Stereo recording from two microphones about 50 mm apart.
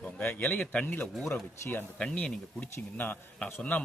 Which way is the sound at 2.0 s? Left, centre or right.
Centre.